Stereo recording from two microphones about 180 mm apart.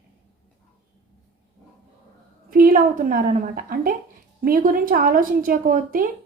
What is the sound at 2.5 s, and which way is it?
A woman's voice, 50° right (ahead or behind).